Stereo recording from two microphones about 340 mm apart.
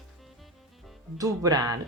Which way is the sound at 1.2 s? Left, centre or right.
Centre.